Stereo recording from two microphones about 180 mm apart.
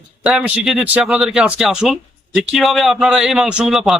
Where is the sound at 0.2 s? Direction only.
5° right (ahead or behind).